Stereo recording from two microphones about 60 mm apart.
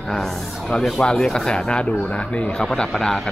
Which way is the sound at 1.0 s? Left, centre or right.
Centre.